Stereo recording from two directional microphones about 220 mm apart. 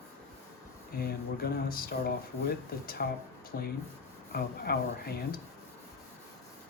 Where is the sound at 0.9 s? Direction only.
45° left (ahead or behind).